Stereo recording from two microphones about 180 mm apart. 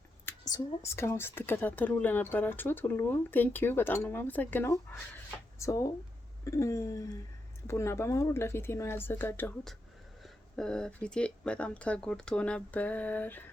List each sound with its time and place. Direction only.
0.5 s speech: 20° left (ahead or behind)